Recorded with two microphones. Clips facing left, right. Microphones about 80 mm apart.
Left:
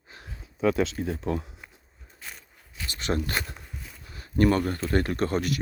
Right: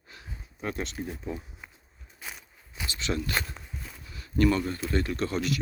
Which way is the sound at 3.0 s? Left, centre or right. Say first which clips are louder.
Left 3 dB; left.